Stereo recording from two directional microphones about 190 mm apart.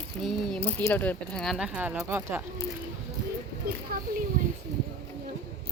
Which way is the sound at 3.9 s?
50° right (ahead or behind).